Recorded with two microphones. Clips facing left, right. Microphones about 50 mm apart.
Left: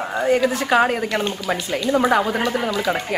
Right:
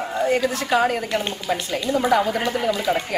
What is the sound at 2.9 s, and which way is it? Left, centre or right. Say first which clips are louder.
Speech: right 1 dB; centre.